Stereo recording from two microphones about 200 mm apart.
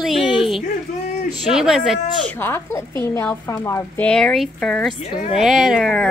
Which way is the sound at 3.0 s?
10° left (ahead or behind).